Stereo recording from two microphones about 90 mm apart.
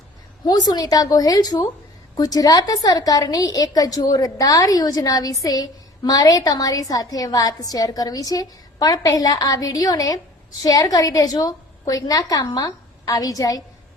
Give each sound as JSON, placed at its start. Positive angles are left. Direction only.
{"t": 0.4, "sound": "a woman's voice", "side_deg": 50}